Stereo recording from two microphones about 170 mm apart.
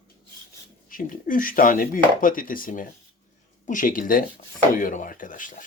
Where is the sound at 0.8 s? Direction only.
55° left (ahead or behind).